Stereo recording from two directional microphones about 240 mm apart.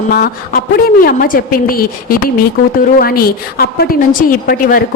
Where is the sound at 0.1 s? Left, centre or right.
Left.